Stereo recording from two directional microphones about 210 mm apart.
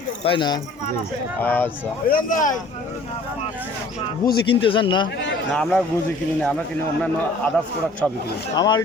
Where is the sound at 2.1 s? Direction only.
40° left (ahead or behind).